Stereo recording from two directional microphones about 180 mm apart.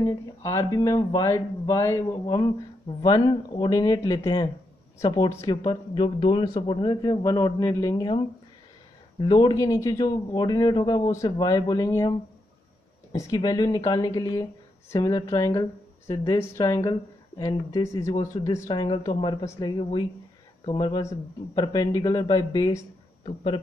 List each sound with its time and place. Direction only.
0.0 s speech: 20° left (ahead or behind)
9.2 s speech: 25° left (ahead or behind)
13.1 s speech: 20° left (ahead or behind)